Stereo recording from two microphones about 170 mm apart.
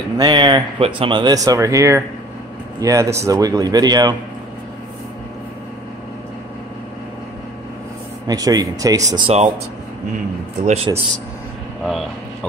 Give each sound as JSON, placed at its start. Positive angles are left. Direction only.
{"t": 0.2, "sound": "speech", "side_deg": -25}
{"t": 8.3, "sound": "speech", "side_deg": -20}
{"t": 9.1, "sound": "speech", "side_deg": -35}
{"t": 10.6, "sound": "speech", "side_deg": -40}